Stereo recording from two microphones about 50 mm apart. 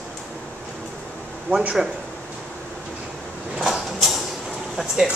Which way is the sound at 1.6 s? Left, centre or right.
Centre.